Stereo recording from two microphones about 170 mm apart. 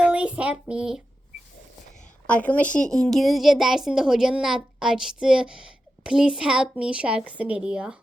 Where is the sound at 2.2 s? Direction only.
10° left (ahead or behind); by 7.9 s 5° right (ahead or behind).